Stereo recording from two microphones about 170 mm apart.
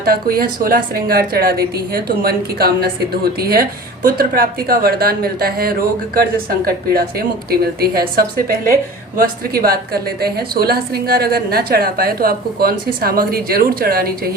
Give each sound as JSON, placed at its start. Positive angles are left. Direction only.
{"t": 0.0, "sound": "a woman's voice", "side_deg": -60}